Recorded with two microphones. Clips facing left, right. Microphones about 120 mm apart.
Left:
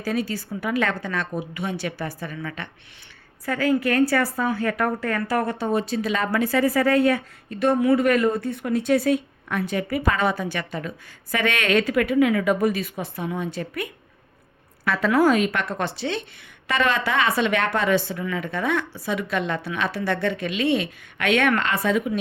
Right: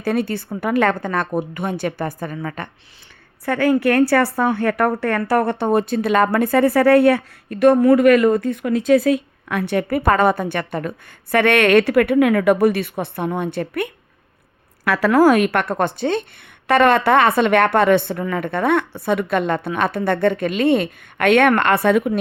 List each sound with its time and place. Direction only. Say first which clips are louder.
0.0 s a woman's voice: right 5 dB; 60° right (ahead or behind); by 2.6 s 45° right (ahead or behind)
3.4 s a woman's voice: right 5 dB; 65° right (ahead or behind); by 9.0 s 90° right
9.5 s a woman's voice: right 5 dB; 70° right (ahead or behind)
14.8 s a woman's voice: right 5 dB; 85° right; by 22.2 s 60° right (ahead or behind)